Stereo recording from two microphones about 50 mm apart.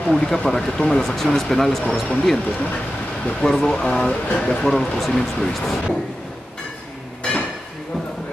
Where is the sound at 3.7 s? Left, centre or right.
Centre.